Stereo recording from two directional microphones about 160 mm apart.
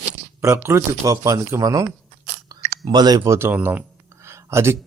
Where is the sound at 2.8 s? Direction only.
25° right (ahead or behind).